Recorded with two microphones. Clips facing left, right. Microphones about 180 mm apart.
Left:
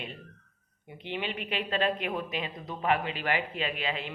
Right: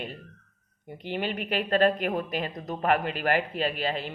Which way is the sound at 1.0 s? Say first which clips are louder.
Right 4 dB; 45° right (ahead or behind).